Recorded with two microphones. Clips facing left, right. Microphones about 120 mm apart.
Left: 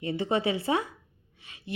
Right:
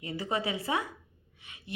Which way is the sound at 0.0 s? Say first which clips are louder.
Left 5 dB; 30° left (ahead or behind).